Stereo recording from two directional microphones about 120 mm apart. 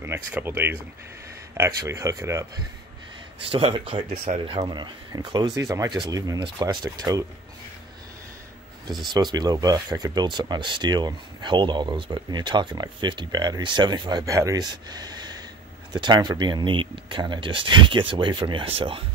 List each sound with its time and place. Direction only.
0.0 s speech: 15° right (ahead or behind)
3.4 s speech: 50° right (ahead or behind); by 7.2 s 30° right (ahead or behind)
9.1 s speech: 35° right (ahead or behind)
14.9 s a sound: 35° right (ahead or behind)
15.9 s speech: 40° right (ahead or behind); by 19.0 s 55° right (ahead or behind)